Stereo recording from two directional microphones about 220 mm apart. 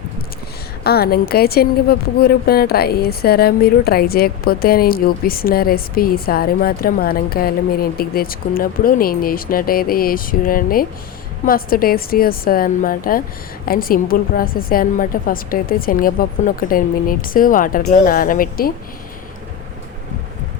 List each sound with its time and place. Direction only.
0.9 s a woman's voice: 45° left (ahead or behind)